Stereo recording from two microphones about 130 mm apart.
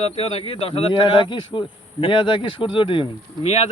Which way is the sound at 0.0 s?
50° left (ahead or behind).